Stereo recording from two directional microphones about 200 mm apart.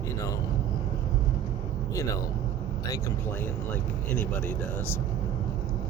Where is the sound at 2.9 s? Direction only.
15° left (ahead or behind).